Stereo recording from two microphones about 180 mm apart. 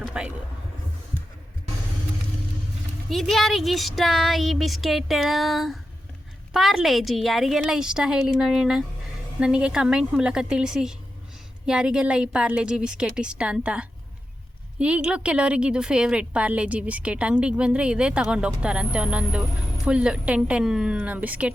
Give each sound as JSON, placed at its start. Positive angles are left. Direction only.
{"t": 0.0, "sound": "vehicle", "side_deg": -5}
{"t": 3.1, "sound": "a woman's voice", "side_deg": 0}